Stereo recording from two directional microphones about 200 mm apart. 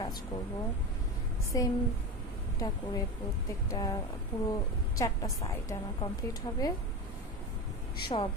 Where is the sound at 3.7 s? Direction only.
20° left (ahead or behind).